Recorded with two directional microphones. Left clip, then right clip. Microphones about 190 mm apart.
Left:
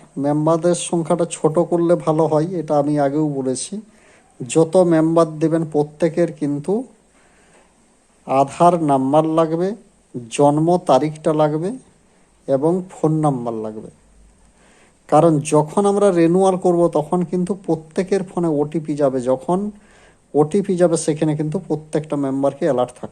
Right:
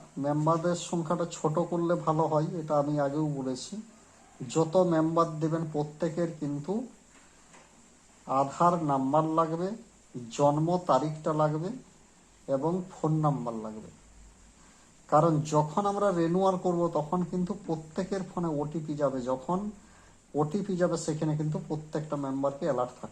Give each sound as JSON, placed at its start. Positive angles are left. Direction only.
{"t": 0.2, "sound": "speech", "side_deg": 20}
{"t": 8.2, "sound": "speech", "side_deg": 20}
{"t": 15.1, "sound": "speech", "side_deg": 25}